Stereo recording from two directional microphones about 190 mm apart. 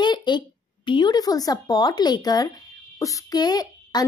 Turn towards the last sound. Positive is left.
turn(degrees=20)  # may be behind; listen again after turning